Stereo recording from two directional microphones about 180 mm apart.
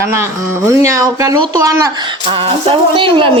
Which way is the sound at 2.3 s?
30° right (ahead or behind).